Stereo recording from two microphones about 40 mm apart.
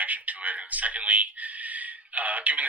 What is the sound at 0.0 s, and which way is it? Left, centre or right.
Speech, right.